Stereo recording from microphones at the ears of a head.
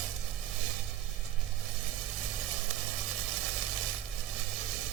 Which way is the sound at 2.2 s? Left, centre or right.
Right.